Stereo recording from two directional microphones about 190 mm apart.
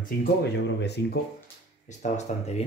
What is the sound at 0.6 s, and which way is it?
Speech, 65° left (ahead or behind).